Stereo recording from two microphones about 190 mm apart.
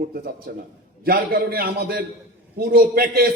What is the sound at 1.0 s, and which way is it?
A man's voice, 50° right (ahead or behind).